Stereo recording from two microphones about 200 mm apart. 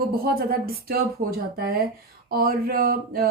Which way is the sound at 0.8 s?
50° right (ahead or behind).